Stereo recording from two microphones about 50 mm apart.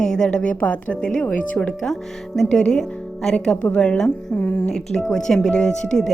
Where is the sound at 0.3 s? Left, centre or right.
Left.